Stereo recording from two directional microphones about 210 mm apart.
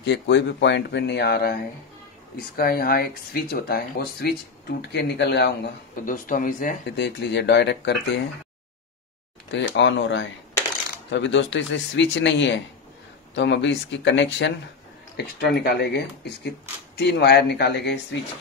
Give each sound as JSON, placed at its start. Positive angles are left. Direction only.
{"t": 0.0, "sound": "speech", "side_deg": 55}
{"t": 9.5, "sound": "speech", "side_deg": 60}